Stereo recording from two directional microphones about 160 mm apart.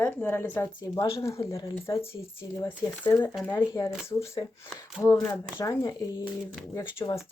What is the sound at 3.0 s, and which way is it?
Speech, 10° left (ahead or behind).